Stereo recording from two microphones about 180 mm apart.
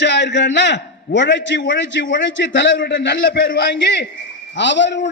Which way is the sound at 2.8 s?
75° left (ahead or behind).